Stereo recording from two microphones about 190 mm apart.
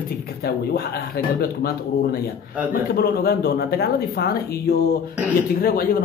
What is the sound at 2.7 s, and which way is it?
Speech, 55° left (ahead or behind).